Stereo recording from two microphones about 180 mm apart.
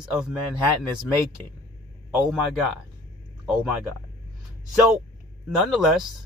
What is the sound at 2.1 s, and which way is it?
Speech, 5° right (ahead or behind).